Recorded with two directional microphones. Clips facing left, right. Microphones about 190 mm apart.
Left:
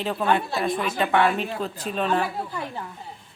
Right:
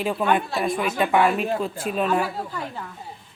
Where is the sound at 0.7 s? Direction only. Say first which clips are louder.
Right 2 dB; 10° right (ahead or behind).